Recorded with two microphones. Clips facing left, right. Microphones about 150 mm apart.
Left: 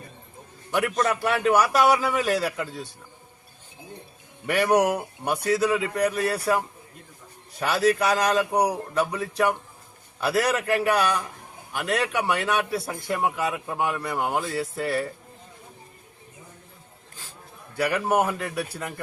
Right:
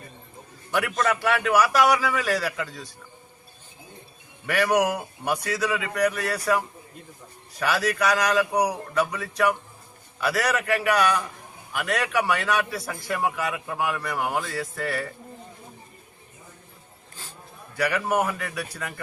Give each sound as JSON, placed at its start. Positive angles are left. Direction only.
{"t": 0.7, "sound": "a man's voice", "side_deg": 20}
{"t": 4.4, "sound": "a man's voice", "side_deg": 25}
{"t": 17.7, "sound": "a man's voice", "side_deg": 30}